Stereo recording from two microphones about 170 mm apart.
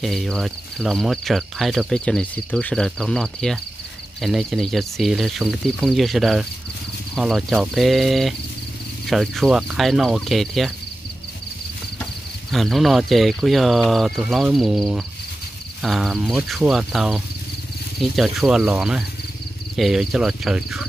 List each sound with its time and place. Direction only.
0.0 s speech: centre (ahead or behind)
12.4 s speech: centre (ahead or behind)